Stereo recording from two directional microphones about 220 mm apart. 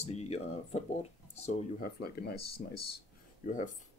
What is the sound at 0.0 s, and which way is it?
Speech, 30° left (ahead or behind).